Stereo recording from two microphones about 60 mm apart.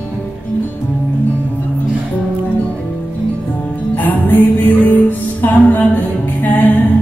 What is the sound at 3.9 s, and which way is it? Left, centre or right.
Music, left.